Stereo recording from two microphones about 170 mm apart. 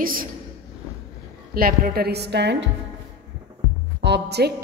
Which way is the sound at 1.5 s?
60° right (ahead or behind).